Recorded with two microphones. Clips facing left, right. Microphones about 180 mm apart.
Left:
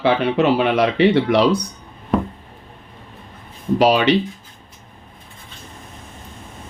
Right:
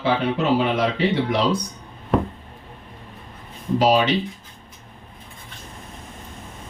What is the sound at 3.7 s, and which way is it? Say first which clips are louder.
Speech: left 2 dB; 70° left (ahead or behind).